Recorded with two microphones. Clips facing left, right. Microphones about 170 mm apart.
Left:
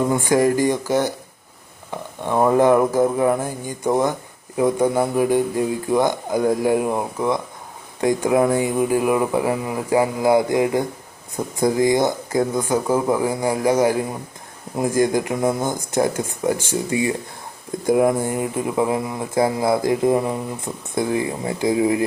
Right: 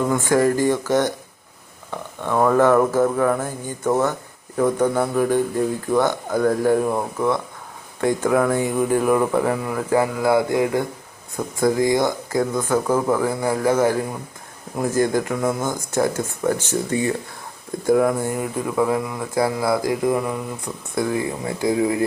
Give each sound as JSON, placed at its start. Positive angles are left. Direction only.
{"t": 0.1, "sound": "speech", "side_deg": 15}